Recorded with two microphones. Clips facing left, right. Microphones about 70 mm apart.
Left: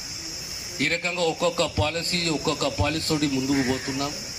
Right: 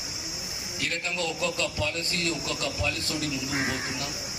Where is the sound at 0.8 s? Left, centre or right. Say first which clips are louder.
Left 6 dB; left.